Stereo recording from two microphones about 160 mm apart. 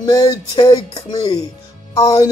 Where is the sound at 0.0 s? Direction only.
20° left (ahead or behind).